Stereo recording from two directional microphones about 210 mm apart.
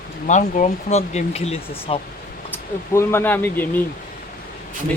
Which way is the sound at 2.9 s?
10° left (ahead or behind).